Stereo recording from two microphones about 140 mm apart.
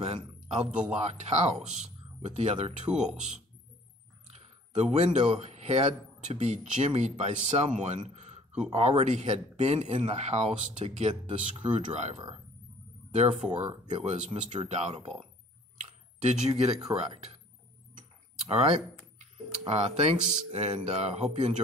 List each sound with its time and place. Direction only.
0.0 s speech: 50° right (ahead or behind)
4.3 s a man's voice: 50° right (ahead or behind)
13.4 s speech: 50° right (ahead or behind)
15.8 s a sound: 50° right (ahead or behind)
18.5 s speech: 45° right (ahead or behind)
19.1 s a sound: 50° right (ahead or behind)
20.5 s speech: 50° right (ahead or behind)